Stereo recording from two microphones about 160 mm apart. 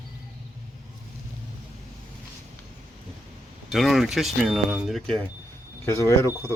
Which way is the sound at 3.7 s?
Centre (ahead or behind).